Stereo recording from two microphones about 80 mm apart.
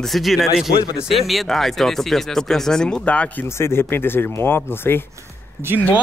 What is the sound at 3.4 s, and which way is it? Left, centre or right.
Speech, left.